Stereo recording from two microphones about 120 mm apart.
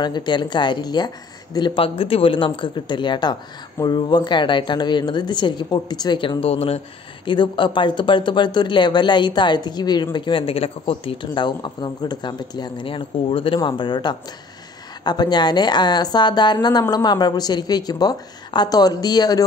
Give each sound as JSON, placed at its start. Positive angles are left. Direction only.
{"t": 0.0, "sound": "speech", "side_deg": 40}
{"t": 2.0, "sound": "speech", "side_deg": 50}
{"t": 7.2, "sound": "speech", "side_deg": 45}